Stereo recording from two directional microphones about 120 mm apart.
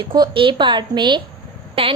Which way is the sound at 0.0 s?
40° right (ahead or behind).